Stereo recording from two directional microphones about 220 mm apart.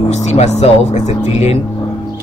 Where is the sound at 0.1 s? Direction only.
30° left (ahead or behind).